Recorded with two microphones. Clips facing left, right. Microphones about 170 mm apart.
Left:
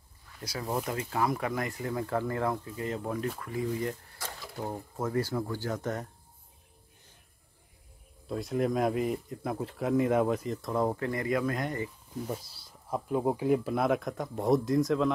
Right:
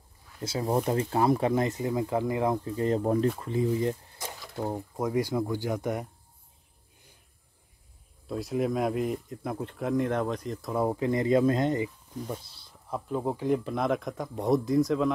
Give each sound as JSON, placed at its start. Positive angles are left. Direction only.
{"t": 0.4, "sound": "speech", "side_deg": -25}
{"t": 2.6, "sound": "speech", "side_deg": -35}
{"t": 8.3, "sound": "speech", "side_deg": 0}
{"t": 11.1, "sound": "speech", "side_deg": -25}
{"t": 12.3, "sound": "speech", "side_deg": 10}